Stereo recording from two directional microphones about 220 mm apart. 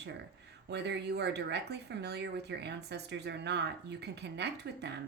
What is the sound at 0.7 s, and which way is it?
Speech, 50° right (ahead or behind).